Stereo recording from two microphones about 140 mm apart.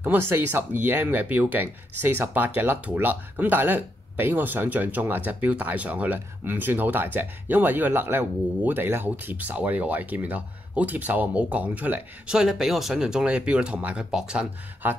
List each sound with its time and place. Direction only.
0.0 s speech: 15° right (ahead or behind)